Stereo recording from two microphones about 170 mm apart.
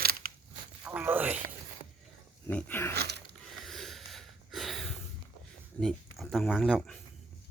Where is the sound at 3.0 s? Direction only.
75° right (ahead or behind).